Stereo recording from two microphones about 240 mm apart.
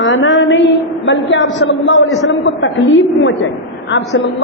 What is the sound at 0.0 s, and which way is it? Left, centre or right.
A woman's voice, left.